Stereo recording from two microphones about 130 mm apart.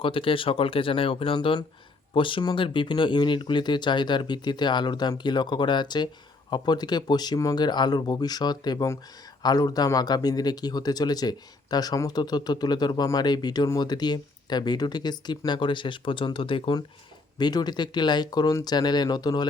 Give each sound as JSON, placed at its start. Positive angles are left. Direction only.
{"t": 0.0, "sound": "a man's voice", "side_deg": 45}